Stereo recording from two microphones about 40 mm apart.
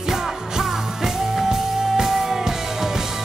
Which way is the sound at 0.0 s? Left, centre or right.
Centre.